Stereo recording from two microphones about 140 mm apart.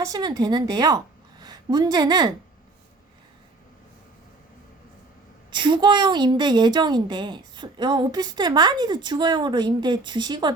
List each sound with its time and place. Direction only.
0.0 s a woman's voice: 30° right (ahead or behind)
5.5 s a woman's voice: 35° right (ahead or behind)